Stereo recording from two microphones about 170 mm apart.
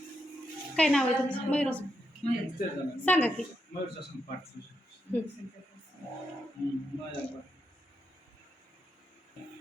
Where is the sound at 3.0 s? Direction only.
10° left (ahead or behind).